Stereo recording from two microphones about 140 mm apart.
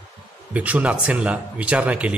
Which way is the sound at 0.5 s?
10° right (ahead or behind).